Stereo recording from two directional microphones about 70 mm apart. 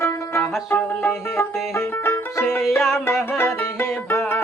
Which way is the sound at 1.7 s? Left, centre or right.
Left.